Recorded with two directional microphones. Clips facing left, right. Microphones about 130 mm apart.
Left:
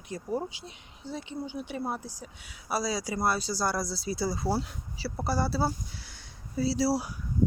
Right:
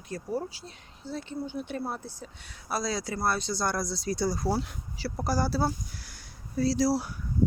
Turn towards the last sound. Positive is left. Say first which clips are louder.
# right 1 dB
turn(degrees=10)  # may be behind; listen again after turning